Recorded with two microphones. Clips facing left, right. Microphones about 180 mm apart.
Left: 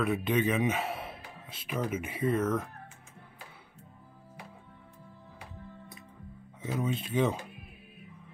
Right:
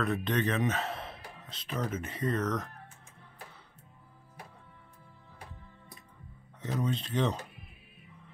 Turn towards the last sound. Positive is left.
turn(degrees=10)  # may be behind; listen again after turning